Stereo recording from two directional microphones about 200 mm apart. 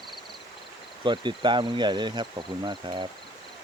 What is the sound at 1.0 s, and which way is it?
Speech, 25° right (ahead or behind).